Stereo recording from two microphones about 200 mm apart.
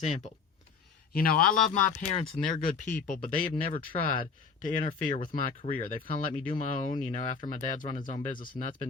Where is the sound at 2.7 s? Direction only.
40° left (ahead or behind).